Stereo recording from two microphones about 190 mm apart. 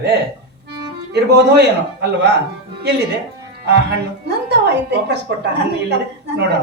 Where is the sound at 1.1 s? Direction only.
60° right (ahead or behind).